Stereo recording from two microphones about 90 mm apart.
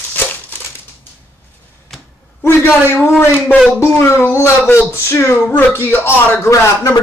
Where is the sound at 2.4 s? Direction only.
25° left (ahead or behind).